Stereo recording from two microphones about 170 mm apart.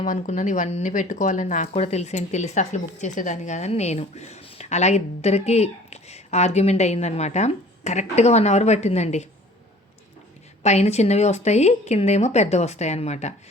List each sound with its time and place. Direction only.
0.0 s speech: 45° left (ahead or behind)
10.6 s speech: 40° left (ahead or behind)